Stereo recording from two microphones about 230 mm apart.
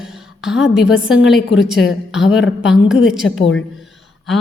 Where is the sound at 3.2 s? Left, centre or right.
Left.